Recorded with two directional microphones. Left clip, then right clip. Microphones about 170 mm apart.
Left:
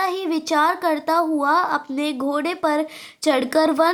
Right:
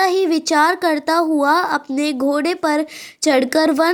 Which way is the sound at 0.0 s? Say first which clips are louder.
Right 6 dB; 25° right (ahead or behind).